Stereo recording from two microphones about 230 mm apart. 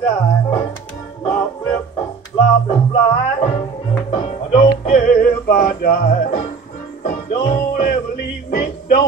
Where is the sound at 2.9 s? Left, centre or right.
Centre.